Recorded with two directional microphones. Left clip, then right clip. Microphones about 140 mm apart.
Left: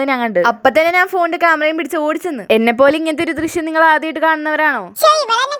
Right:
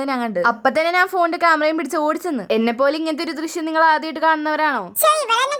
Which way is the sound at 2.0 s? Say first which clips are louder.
Left 2 dB; 35° left (ahead or behind).